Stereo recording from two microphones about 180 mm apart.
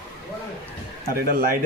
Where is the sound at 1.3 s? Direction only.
50° right (ahead or behind).